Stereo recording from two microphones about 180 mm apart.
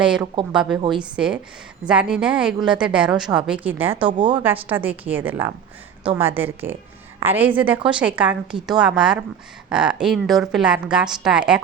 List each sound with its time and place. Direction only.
0.0 s a woman's voice: 5° right (ahead or behind)
3.9 s speech: 30° right (ahead or behind)
4.4 s a woman's voice: 10° right (ahead or behind)